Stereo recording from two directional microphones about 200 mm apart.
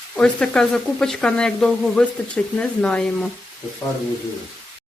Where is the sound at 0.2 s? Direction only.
5° left (ahead or behind).